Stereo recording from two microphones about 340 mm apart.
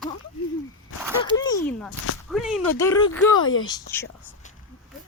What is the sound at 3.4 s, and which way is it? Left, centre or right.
Speech, left.